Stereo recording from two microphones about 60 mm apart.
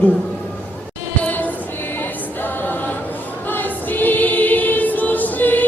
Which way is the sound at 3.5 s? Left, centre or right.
Left.